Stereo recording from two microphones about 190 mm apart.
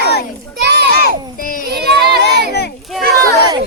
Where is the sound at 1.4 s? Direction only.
45° left (ahead or behind).